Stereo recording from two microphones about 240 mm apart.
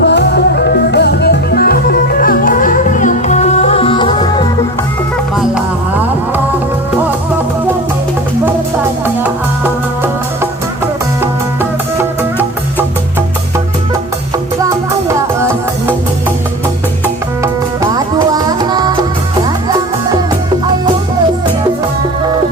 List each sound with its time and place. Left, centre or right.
0.0 s music: left; by 4.4 s centre
5.4 s music: centre
15.4 s music: centre
17.9 s music: centre